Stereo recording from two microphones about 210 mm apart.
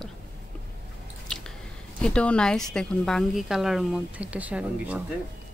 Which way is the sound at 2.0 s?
5° left (ahead or behind).